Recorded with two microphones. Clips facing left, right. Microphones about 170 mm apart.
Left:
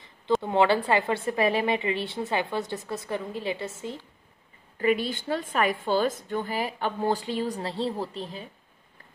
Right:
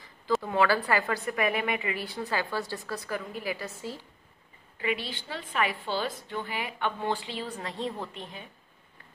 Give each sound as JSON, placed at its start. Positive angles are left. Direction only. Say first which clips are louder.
{"t": 0.4, "sound": "a woman's voice", "louder": "left 4 dB", "side_deg": 25}
{"t": 4.7, "sound": "a woman's voice", "louder": "left 7 dB", "side_deg": 45}